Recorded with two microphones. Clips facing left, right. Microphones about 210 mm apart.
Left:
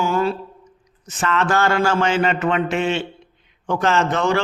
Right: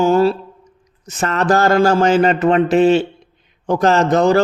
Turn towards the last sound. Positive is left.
turn(degrees=-40)  # may be behind; listen again after turning